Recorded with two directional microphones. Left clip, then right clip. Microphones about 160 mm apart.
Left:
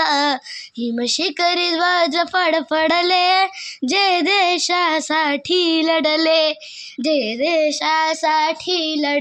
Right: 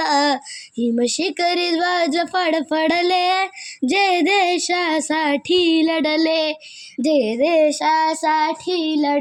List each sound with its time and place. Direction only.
0.0 s child singing: centre (ahead or behind)
0.8 s speech: centre (ahead or behind)